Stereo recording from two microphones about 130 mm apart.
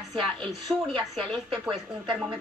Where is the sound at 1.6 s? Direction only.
5° right (ahead or behind).